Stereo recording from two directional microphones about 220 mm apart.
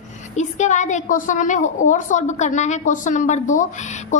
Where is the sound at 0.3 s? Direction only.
35° left (ahead or behind).